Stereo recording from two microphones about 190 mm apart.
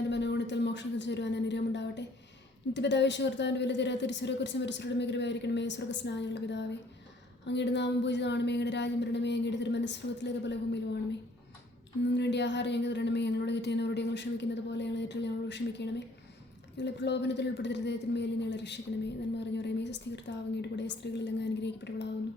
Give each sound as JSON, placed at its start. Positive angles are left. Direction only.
{"t": 0.1, "sound": "a sound", "side_deg": 65}
{"t": 2.7, "sound": "speech", "side_deg": 65}
{"t": 12.1, "sound": "speech", "side_deg": 65}